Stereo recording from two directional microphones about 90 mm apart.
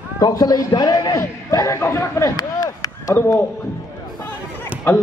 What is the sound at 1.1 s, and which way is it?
A man's voice, 35° left (ahead or behind).